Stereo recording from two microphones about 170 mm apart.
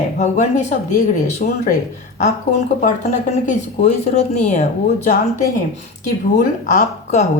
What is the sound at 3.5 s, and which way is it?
Speech, 45° left (ahead or behind).